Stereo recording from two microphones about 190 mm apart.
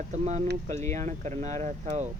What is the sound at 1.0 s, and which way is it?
Speech, 40° right (ahead or behind).